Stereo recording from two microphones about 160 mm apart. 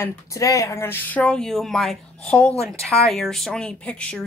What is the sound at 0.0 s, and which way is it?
A woman's voice, 20° left (ahead or behind).